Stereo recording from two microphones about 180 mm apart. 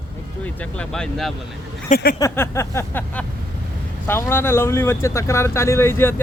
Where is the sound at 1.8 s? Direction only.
50° left (ahead or behind).